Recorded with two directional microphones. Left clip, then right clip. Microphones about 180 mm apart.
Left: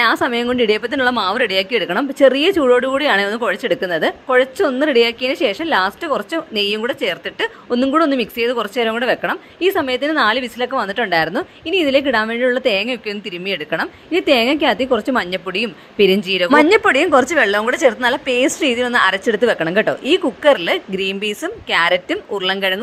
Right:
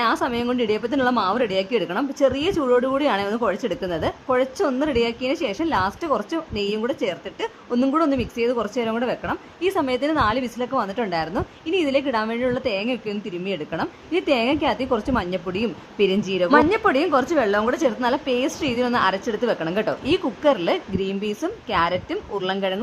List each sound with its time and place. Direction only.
0.0 s a woman's voice: 20° left (ahead or behind)
9.6 s a woman's voice: 15° left (ahead or behind)